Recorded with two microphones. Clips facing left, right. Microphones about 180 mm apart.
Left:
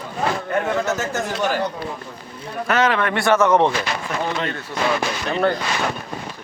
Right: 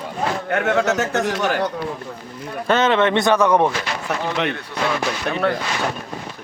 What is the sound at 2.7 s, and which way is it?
Speech, 25° right (ahead or behind).